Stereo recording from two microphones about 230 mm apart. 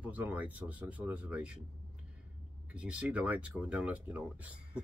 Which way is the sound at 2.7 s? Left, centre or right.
Centre.